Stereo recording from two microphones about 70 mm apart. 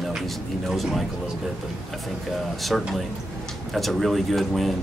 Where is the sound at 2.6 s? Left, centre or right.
Centre.